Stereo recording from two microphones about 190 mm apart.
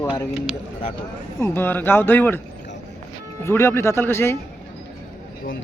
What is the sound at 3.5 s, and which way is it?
Speech, 15° left (ahead or behind).